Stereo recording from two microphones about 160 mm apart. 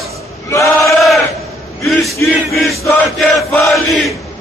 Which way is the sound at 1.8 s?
Centre (ahead or behind).